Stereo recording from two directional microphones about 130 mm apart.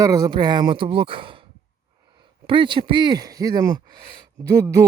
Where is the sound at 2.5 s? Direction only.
40° right (ahead or behind).